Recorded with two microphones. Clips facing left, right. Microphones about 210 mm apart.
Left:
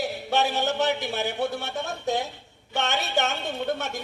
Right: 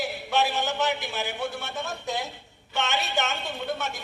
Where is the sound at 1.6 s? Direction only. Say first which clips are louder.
Left 4 dB; 60° left (ahead or behind).